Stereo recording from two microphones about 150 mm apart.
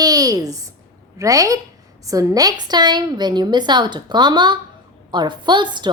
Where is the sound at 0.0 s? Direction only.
25° right (ahead or behind).